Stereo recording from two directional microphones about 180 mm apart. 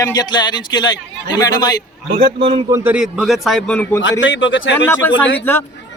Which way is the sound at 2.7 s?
10° right (ahead or behind).